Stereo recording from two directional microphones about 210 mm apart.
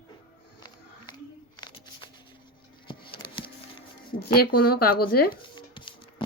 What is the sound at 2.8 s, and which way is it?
Music, 25° left (ahead or behind).